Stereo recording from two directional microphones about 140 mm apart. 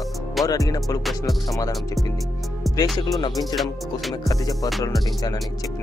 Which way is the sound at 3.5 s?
Centre (ahead or behind).